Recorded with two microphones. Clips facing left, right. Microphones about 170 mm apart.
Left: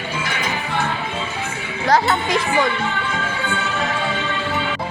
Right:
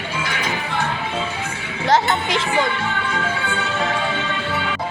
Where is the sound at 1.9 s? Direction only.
25° right (ahead or behind).